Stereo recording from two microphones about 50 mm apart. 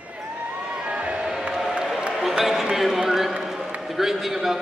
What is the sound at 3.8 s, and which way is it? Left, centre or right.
Speech, centre.